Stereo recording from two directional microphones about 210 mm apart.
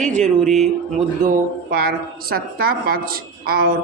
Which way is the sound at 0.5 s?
Centre (ahead or behind).